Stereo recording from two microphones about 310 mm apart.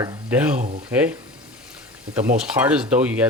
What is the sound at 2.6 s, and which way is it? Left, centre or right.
Speech, centre.